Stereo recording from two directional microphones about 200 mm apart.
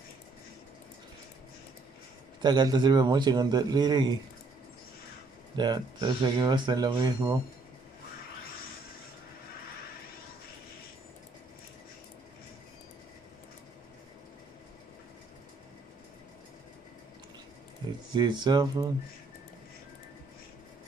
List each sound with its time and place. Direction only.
2.4 s speech: 20° right (ahead or behind)
5.6 s speech: 20° right (ahead or behind)
18.1 s speech: 20° right (ahead or behind)